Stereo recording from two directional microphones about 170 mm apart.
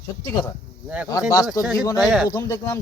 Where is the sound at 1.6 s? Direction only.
Centre (ahead or behind).